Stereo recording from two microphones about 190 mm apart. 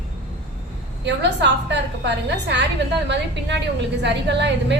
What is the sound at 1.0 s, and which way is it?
A woman's voice, 70° right (ahead or behind).